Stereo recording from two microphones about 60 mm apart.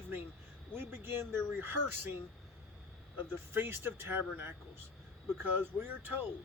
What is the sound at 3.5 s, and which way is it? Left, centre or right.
Speech, right.